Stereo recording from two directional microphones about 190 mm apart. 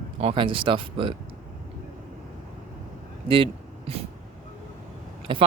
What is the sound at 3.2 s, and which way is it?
Speech, 25° right (ahead or behind).